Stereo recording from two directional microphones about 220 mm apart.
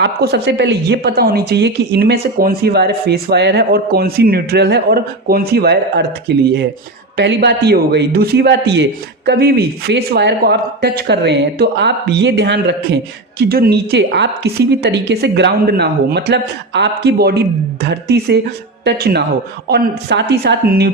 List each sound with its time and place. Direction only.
0.0 s speech: 50° right (ahead or behind)